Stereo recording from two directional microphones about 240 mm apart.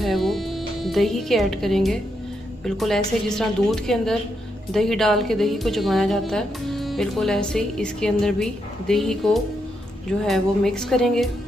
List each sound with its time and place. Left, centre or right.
0.0 s music: centre
2.6 s a woman's voice: centre